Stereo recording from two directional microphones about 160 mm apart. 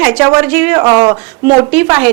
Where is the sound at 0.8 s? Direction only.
20° right (ahead or behind).